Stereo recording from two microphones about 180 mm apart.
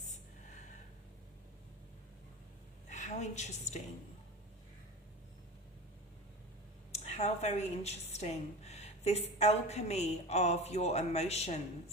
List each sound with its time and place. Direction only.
2.9 s a woman's voice: 40° left (ahead or behind)
6.9 s speech: 35° left (ahead or behind)